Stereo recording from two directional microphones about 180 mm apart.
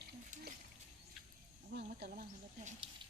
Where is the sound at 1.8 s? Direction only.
55° right (ahead or behind).